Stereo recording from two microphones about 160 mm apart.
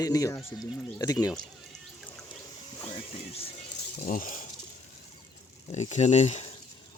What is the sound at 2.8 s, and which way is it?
Speech, 35° left (ahead or behind).